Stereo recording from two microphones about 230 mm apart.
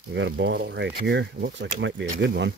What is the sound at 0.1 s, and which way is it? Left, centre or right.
Speech, right.